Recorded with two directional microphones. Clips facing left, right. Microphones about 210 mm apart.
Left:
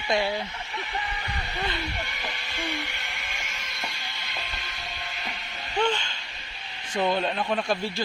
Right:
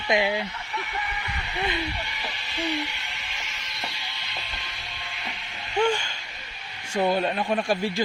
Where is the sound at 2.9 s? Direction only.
50° left (ahead or behind).